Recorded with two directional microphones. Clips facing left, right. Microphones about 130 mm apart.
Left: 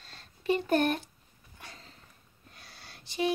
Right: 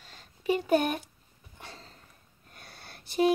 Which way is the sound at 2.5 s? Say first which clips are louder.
Right 3 dB; 55° right (ahead or behind).